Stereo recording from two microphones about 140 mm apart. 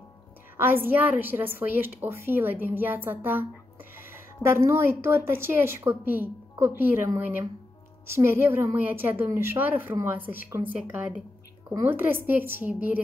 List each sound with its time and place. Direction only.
0.6 s a woman's voice: 15° right (ahead or behind)